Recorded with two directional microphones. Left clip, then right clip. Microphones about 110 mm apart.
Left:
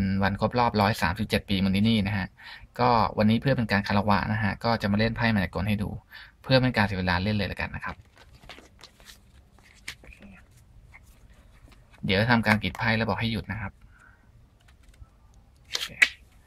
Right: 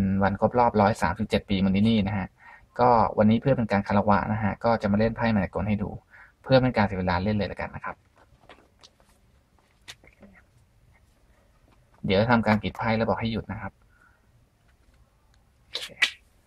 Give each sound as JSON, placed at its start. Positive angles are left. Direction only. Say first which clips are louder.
{"t": 0.0, "sound": "speech", "louder": "right 3 dB", "side_deg": 0}
{"t": 8.8, "sound": "a sound", "louder": "left 4 dB", "side_deg": 45}
{"t": 12.1, "sound": "speech", "louder": "right 1 dB", "side_deg": 0}